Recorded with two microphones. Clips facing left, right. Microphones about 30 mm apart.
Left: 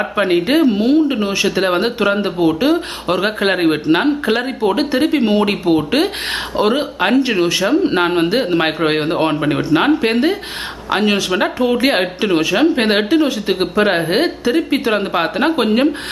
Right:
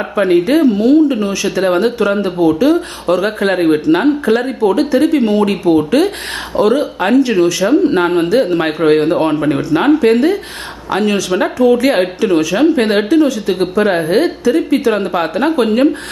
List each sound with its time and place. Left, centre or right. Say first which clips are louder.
0.2 s speech: right 3 dB; left
9.6 s speech: right 2 dB; left
11.3 s speech: right 2 dB; centre
11.5 s speech: right 7 dB; left